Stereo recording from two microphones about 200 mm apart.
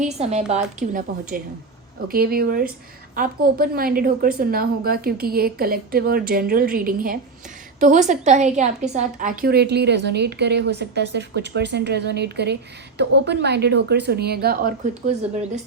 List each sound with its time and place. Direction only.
0.0 s speech: 35° right (ahead or behind)
2.0 s a woman's voice: 50° right (ahead or behind)